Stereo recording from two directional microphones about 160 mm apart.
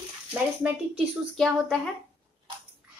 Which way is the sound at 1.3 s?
Centre (ahead or behind).